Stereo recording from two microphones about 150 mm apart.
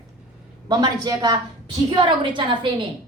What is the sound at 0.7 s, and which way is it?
A woman's voice, 25° right (ahead or behind).